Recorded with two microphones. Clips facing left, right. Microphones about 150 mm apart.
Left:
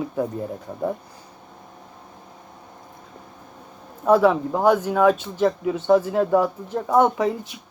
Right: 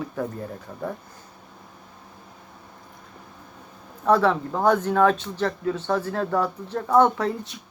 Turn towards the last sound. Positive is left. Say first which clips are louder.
# left 1 dB
turn(degrees=10)  # may be behind; listen again after turning